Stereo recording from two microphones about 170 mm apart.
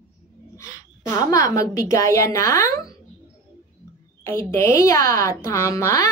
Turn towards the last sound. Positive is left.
turn(degrees=20)  # may be behind; listen again after turning